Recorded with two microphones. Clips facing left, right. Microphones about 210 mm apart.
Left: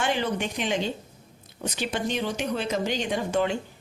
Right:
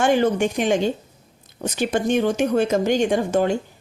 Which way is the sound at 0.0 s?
45° right (ahead or behind).